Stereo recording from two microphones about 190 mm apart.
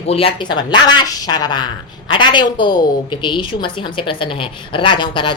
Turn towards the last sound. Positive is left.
turn(degrees=25)  # may be behind; listen again after turning